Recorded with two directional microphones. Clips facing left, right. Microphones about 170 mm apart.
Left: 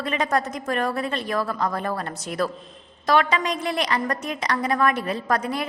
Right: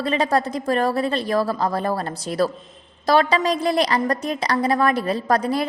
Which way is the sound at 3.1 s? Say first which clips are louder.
Right 3 dB; 35° right (ahead or behind).